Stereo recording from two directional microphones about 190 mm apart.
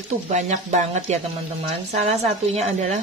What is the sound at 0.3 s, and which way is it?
Speech, 40° right (ahead or behind).